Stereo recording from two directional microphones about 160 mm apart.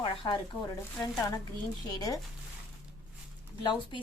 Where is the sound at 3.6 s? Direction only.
30° left (ahead or behind).